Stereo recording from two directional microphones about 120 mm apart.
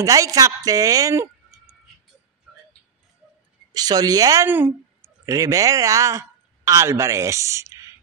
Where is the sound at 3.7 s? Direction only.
30° right (ahead or behind).